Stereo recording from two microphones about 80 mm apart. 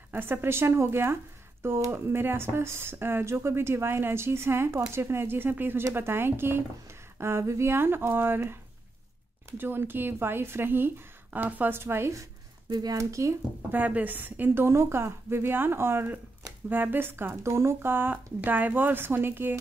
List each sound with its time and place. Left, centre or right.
0.1 s speech: right
9.6 s speech: right
12.6 s speech: right
12.9 s speech: right
13.7 s speech: right